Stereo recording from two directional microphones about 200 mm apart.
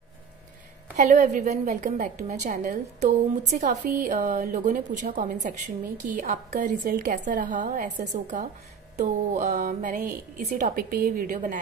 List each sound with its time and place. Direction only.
0.9 s a woman's voice: 35° right (ahead or behind)